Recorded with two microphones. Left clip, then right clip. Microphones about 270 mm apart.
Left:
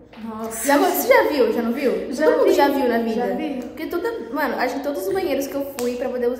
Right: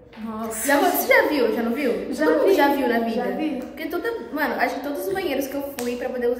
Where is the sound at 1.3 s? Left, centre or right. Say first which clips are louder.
Left 2 dB; centre.